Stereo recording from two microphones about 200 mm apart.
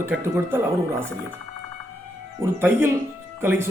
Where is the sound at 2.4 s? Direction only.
10° right (ahead or behind).